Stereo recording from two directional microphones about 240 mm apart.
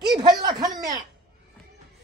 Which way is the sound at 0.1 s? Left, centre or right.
Centre.